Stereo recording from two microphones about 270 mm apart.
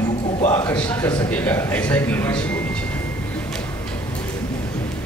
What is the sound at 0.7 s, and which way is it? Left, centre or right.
A man's voice, centre.